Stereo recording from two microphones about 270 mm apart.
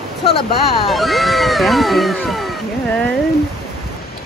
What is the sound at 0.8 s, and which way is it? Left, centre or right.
Speech, centre.